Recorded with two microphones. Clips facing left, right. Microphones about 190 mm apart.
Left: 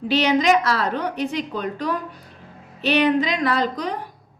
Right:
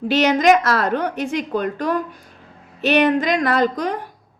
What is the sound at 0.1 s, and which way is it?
Speech, 50° right (ahead or behind).